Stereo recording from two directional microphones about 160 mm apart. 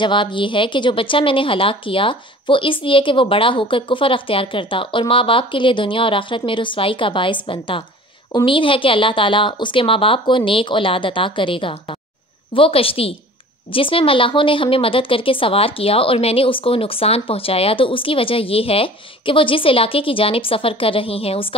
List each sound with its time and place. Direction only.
0.0 s a woman's voice: 30° left (ahead or behind)